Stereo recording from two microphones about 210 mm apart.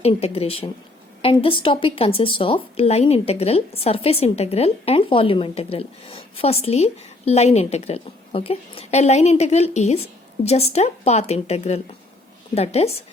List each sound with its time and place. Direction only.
0.0 s a woman's voice: 30° left (ahead or behind)